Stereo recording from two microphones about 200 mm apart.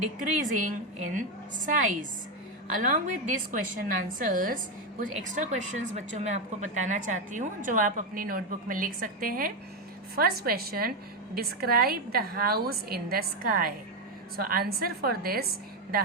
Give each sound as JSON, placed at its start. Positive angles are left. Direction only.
{"t": 0.2, "sound": "a woman's voice", "side_deg": -40}